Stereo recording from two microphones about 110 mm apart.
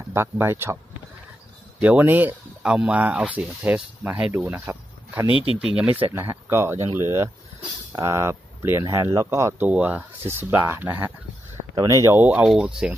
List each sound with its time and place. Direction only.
0.1 s speech: 20° right (ahead or behind)
1.8 s speech: 15° right (ahead or behind)
5.3 s speech: 50° left (ahead or behind)
5.8 s speech: 15° right (ahead or behind)
9.7 s speech: 15° right (ahead or behind)
12.2 s speech: 15° right (ahead or behind)